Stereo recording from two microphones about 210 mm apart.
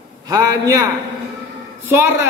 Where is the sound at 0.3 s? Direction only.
15° right (ahead or behind).